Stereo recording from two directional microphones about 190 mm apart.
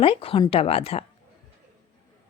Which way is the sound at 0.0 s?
30° left (ahead or behind).